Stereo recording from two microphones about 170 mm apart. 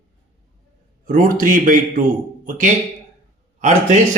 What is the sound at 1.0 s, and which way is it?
A man's voice, 50° right (ahead or behind).